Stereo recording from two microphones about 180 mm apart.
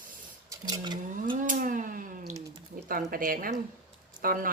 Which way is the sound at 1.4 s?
50° right (ahead or behind).